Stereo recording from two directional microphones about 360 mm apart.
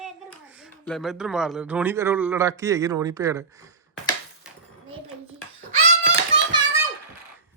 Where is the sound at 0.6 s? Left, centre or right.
Centre.